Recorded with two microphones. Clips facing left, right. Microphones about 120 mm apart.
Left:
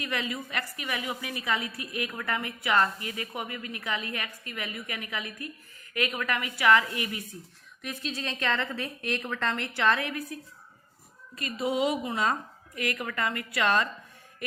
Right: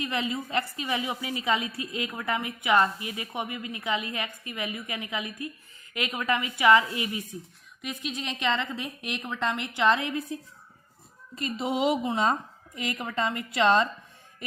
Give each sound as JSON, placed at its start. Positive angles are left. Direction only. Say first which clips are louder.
{"t": 0.0, "sound": "a woman's voice", "louder": "right 3 dB", "side_deg": -25}
{"t": 11.3, "sound": "a woman's voice", "louder": "even", "side_deg": -25}